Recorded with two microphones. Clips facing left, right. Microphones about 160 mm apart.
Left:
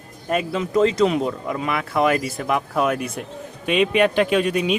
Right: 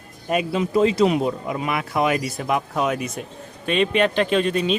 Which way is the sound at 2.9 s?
60° left (ahead or behind).